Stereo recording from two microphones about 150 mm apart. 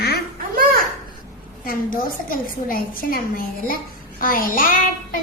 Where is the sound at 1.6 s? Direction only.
70° left (ahead or behind).